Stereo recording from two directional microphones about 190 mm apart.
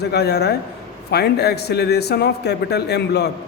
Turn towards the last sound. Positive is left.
turn(degrees=60)  # may be behind; listen again after turning